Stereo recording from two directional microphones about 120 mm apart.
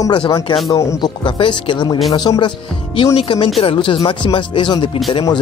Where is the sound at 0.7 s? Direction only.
25° left (ahead or behind).